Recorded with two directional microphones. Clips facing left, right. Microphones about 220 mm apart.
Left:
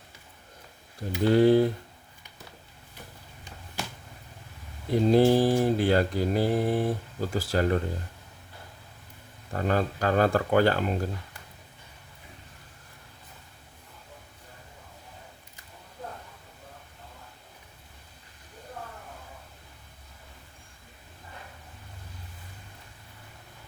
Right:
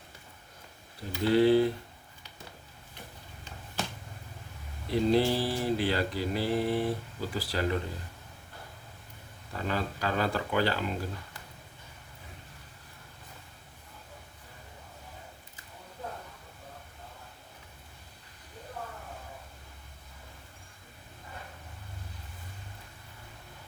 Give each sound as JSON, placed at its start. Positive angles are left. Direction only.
{"t": 1.2, "sound": "speech", "side_deg": 45}
{"t": 4.9, "sound": "speech", "side_deg": 50}
{"t": 9.5, "sound": "speech", "side_deg": 50}